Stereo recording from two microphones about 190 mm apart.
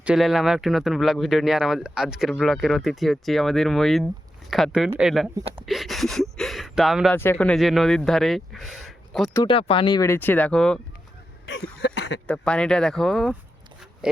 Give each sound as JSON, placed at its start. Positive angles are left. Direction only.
{"t": 0.0, "sound": "speech", "side_deg": -5}
{"t": 7.2, "sound": "speech", "side_deg": 10}
{"t": 9.3, "sound": "speech", "side_deg": 25}
{"t": 11.8, "sound": "a sound", "side_deg": 70}
{"t": 12.3, "sound": "speech", "side_deg": 5}
{"t": 14.0, "sound": "a sound", "side_deg": -5}